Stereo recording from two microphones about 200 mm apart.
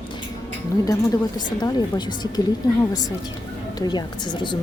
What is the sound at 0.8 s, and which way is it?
Speech, 20° left (ahead or behind).